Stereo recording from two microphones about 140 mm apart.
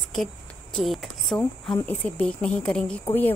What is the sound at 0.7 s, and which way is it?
Speech, centre (ahead or behind).